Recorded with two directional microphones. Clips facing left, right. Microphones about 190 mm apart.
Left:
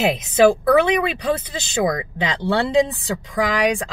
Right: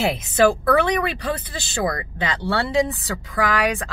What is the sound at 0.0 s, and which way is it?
Speech, 15° left (ahead or behind).